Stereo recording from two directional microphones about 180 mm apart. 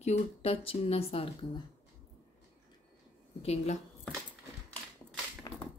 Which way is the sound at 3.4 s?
35° left (ahead or behind).